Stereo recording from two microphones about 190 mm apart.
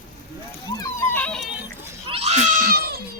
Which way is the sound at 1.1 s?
5° left (ahead or behind).